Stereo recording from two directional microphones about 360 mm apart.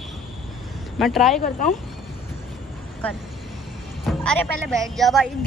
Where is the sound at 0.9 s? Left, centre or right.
Centre.